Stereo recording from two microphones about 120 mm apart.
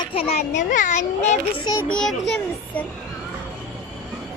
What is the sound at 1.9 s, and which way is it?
Speech, 5° left (ahead or behind).